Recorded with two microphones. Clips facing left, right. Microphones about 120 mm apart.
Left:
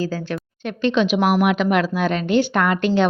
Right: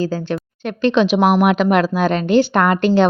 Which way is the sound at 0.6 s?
40° right (ahead or behind).